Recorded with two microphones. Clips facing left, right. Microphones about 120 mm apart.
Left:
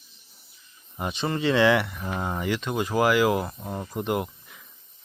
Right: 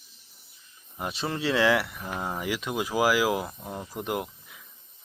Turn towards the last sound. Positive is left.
turn(degrees=0)  # may be behind; listen again after turning